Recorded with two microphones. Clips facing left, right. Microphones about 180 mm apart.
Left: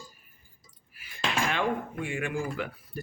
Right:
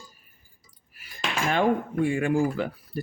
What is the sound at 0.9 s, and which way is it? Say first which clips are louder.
Speech: even; 40° right (ahead or behind).